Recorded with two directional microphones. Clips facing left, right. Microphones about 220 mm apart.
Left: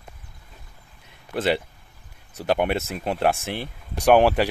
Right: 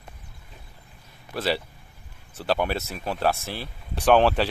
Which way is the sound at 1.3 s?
20° left (ahead or behind).